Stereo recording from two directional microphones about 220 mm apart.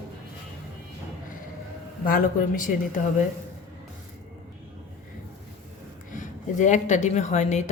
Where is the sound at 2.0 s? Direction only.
40° left (ahead or behind).